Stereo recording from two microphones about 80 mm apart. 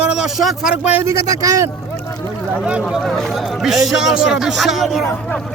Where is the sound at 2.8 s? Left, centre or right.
Centre.